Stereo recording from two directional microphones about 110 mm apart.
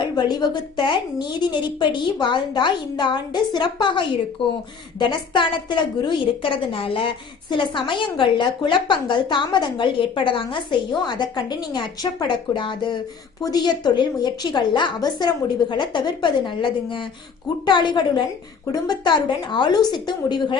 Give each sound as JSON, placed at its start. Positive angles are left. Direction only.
{"t": 0.0, "sound": "a woman's voice", "side_deg": 45}